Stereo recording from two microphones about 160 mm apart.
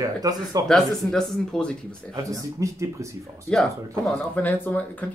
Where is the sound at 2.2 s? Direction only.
20° right (ahead or behind).